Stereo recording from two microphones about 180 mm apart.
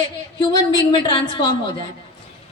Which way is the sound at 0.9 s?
25° left (ahead or behind).